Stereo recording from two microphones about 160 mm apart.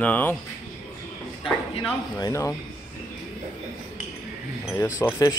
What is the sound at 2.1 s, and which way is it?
Speech, 20° left (ahead or behind).